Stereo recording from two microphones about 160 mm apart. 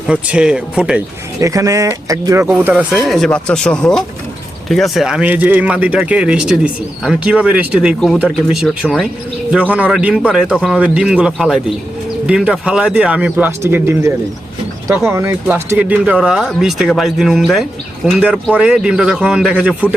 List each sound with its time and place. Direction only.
0.1 s speech: 5° right (ahead or behind)
1.4 s speech: 20° right (ahead or behind)